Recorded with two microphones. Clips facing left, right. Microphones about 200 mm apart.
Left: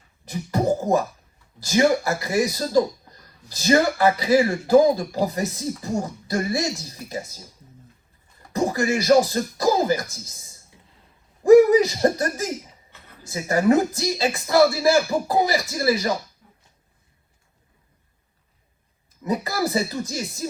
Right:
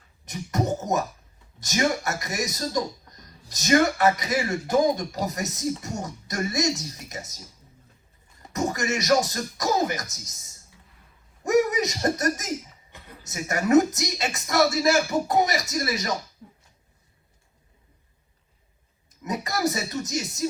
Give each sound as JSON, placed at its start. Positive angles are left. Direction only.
{"t": 0.3, "sound": "beatboxing", "side_deg": 30}
{"t": 1.5, "sound": "speech", "side_deg": 30}
{"t": 8.5, "sound": "speech", "side_deg": 30}
{"t": 16.4, "sound": "a sound", "side_deg": -30}
{"t": 19.2, "sound": "speech", "side_deg": 30}